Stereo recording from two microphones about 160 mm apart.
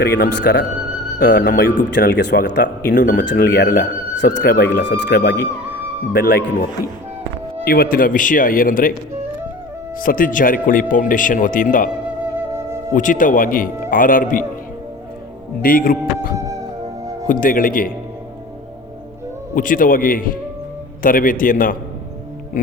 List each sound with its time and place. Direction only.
0.0 s speech: 85° left
1.2 s speech: 60° left (ahead or behind); by 2.6 s 90° left
2.9 s speech: 55° left (ahead or behind)
3.2 s speech: 75° left (ahead or behind)
6.1 s speech: 65° left (ahead or behind)
10.0 s speech: 60° left (ahead or behind)
12.9 s speech: 55° left (ahead or behind)
15.6 s speech: 60° left (ahead or behind)
19.5 s speech: 60° left (ahead or behind)